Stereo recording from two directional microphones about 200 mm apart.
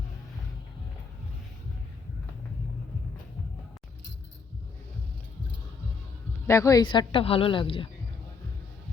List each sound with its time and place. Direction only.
6.5 s a woman's voice: 15° left (ahead or behind)